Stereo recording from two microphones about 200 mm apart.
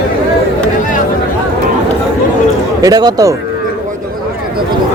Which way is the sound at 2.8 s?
20° right (ahead or behind).